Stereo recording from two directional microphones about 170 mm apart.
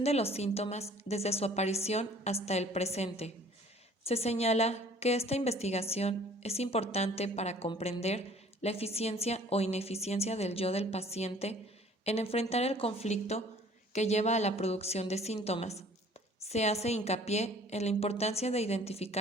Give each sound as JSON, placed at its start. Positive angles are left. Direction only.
{"t": 0.0, "sound": "a woman's voice", "side_deg": 35}